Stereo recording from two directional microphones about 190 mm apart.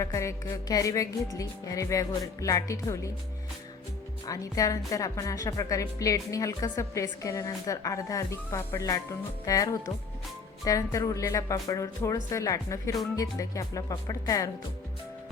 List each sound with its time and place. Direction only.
0.0 s a woman's voice: 15° left (ahead or behind)
4.3 s a woman's voice: 20° left (ahead or behind)